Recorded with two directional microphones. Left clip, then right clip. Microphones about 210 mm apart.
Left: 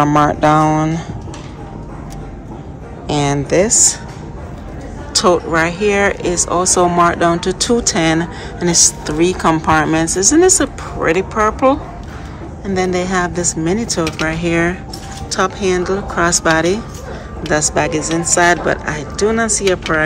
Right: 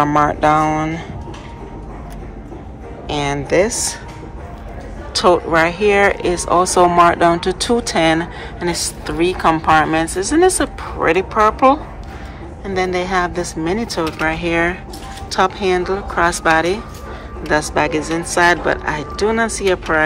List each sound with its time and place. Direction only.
0.0 s speech: centre (ahead or behind)
0.3 s speech: 10° left (ahead or behind)
3.1 s speech: 15° left (ahead or behind)
5.1 s speech: 5° left (ahead or behind)